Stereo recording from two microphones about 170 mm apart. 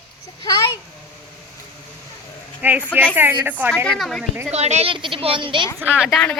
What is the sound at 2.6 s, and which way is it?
A woman's voice, 10° right (ahead or behind).